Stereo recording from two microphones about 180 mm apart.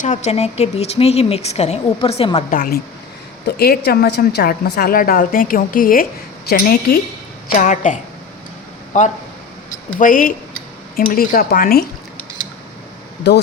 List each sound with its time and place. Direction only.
0.0 s a woman's voice: 40° left (ahead or behind)
2.5 s a woman's voice: 55° left (ahead or behind)
7.5 s a woman's voice: 45° left (ahead or behind)
10.0 s a woman's voice: 50° left (ahead or behind)